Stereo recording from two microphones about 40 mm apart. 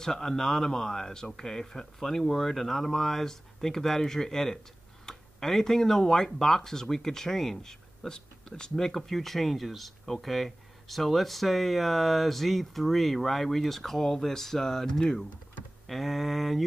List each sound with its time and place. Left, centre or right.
0.0 s speech: centre
15.9 s speech: centre